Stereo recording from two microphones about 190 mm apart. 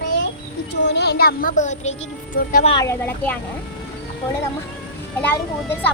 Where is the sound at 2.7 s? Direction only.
15° left (ahead or behind).